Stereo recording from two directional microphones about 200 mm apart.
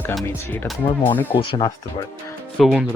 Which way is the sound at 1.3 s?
25° left (ahead or behind).